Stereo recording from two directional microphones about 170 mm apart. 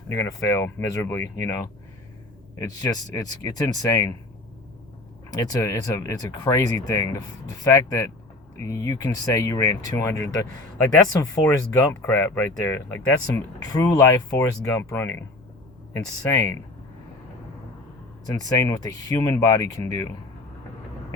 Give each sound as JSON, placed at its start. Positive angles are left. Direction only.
{"t": 0.1, "sound": "speech", "side_deg": 20}
{"t": 5.3, "sound": "speech", "side_deg": 20}
{"t": 18.3, "sound": "speech", "side_deg": 20}